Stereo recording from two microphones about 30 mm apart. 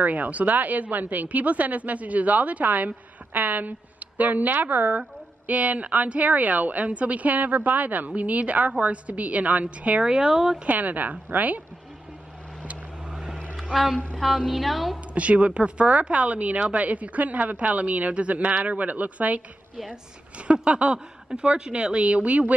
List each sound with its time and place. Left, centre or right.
0.0 s a woman's voice: right
5.5 s speech: right
8.2 s speech: right
10.0 s speech: right
10.7 s speech: right
13.1 s vehicle: centre
14.4 s a woman's voice: centre
15.1 s a woman's voice: right
18.6 s speech: right
19.9 s speech: right
21.4 s speech: right